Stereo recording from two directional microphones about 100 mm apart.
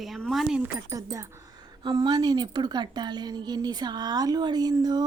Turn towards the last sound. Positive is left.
turn(degrees=-45)  # may be behind; listen again after turning